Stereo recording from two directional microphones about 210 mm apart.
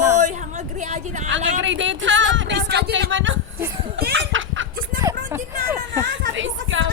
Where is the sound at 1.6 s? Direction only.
65° right (ahead or behind).